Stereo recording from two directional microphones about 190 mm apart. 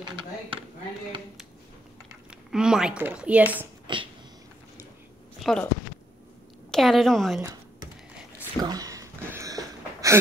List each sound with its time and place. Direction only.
0.0 s speech: 25° right (ahead or behind)
2.5 s a woman's voice: 5° right (ahead or behind)
3.8 s a sound: 25° right (ahead or behind)
5.4 s speech: 5° left (ahead or behind)
6.7 s a woman's voice: centre (ahead or behind)
8.5 s a sound: 20° right (ahead or behind)